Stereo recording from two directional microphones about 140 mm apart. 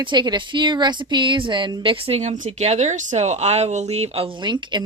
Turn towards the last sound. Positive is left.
turn(degrees=-35)  # may be behind; listen again after turning